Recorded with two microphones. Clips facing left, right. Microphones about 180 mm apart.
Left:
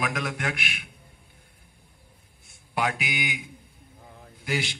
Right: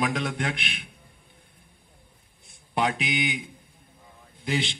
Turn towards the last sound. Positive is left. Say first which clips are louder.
# right 2 dB
turn(degrees=-20)  # may be behind; listen again after turning